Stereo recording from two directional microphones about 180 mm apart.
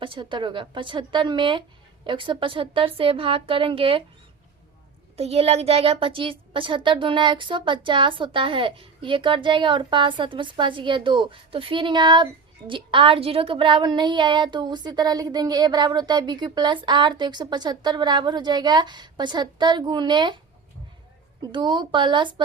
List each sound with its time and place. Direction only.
0.0 s a child's voice: 25° right (ahead or behind)
5.1 s a child's voice: 35° right (ahead or behind)
21.5 s a child's voice: 25° right (ahead or behind)